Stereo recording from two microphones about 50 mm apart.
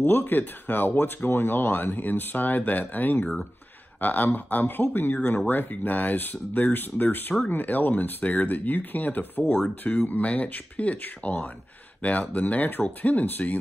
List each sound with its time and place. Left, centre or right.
0.0 s speech: left